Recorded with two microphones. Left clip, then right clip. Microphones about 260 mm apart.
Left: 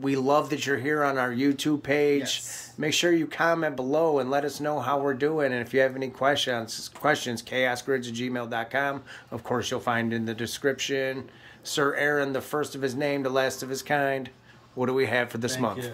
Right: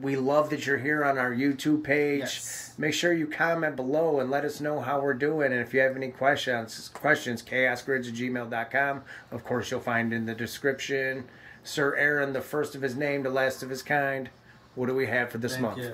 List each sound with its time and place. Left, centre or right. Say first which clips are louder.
0.0 s speech: left 1 dB; centre